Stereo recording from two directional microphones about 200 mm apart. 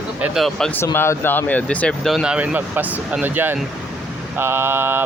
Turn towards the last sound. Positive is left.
turn(degrees=-10)  # may be behind; listen again after turning